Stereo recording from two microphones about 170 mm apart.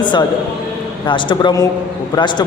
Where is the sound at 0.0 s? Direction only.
25° left (ahead or behind).